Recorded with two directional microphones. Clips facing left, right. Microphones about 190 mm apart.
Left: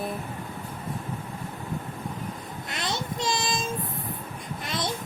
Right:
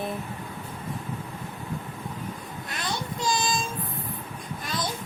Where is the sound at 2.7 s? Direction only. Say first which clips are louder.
Left 1 dB; 20° left (ahead or behind).